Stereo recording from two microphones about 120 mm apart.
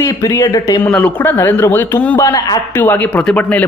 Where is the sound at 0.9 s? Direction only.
10° left (ahead or behind).